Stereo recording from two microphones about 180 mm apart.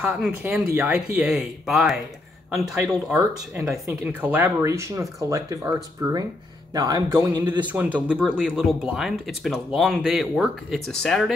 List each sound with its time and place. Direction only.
0.0 s a man's voice: 5° right (ahead or behind)